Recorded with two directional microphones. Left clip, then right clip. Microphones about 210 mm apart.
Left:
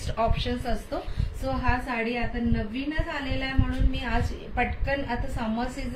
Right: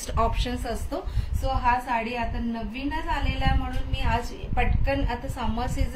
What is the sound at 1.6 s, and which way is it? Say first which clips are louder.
A woman's voice: right 5 dB; 55° right (ahead or behind).